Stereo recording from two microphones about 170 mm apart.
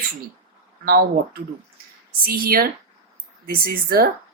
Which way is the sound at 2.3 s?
60° right (ahead or behind).